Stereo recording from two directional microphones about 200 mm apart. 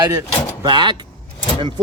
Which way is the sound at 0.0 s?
20° right (ahead or behind).